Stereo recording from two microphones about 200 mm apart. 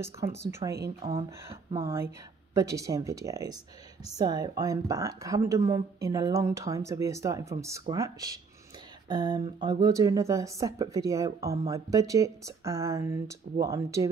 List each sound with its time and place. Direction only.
0.0 s speech: 15° right (ahead or behind)
0.6 s a woman's voice: 25° right (ahead or behind)